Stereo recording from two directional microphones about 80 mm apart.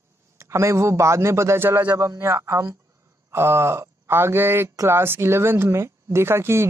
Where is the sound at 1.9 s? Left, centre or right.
Right.